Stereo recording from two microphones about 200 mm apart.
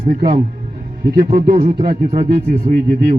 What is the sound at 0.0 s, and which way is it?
Speech, 35° right (ahead or behind).